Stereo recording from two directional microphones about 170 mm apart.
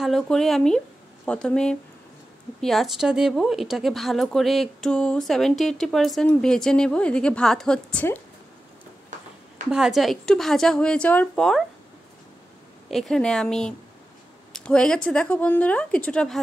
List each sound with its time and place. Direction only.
0.0 s speech: centre (ahead or behind)
9.7 s speech: 5° right (ahead or behind)
12.9 s speech: centre (ahead or behind)